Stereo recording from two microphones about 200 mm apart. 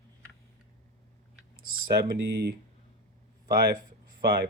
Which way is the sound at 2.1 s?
55° right (ahead or behind).